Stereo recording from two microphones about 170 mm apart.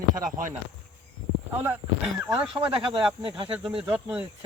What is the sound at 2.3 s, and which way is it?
Speech, 30° right (ahead or behind).